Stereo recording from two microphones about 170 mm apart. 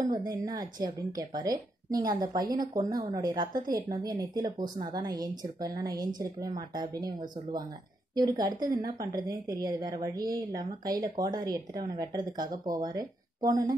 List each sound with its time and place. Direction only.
0.0 s speech: 25° right (ahead or behind)